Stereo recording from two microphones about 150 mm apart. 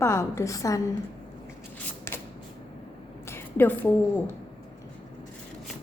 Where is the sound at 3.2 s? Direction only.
15° left (ahead or behind).